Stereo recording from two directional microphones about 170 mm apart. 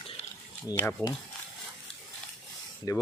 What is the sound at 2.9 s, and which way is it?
Speech, 20° left (ahead or behind).